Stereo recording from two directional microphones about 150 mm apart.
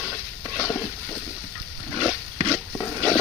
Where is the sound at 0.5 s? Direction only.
20° left (ahead or behind).